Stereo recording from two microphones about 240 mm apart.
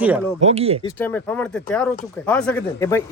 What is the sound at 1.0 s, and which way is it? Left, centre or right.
Speech, centre.